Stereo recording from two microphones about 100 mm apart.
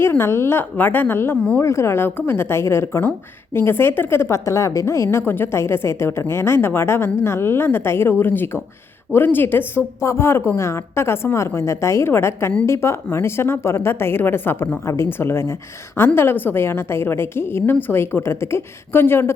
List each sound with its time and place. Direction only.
0.0 s a woman's voice: 25° left (ahead or behind)